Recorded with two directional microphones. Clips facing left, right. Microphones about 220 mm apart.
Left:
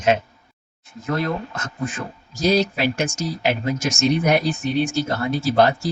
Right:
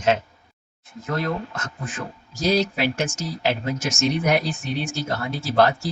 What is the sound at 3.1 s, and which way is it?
Speech, 15° left (ahead or behind).